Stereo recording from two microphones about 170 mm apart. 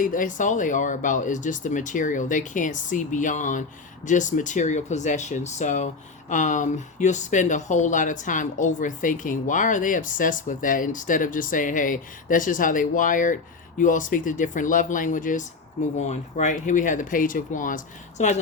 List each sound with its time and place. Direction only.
0.0 s speech: 50° left (ahead or behind)